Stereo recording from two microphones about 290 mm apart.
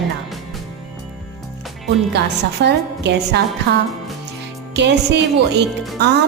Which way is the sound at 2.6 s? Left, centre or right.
Right.